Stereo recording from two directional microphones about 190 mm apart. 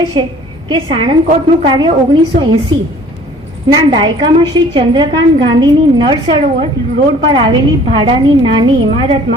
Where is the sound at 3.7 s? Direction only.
25° right (ahead or behind).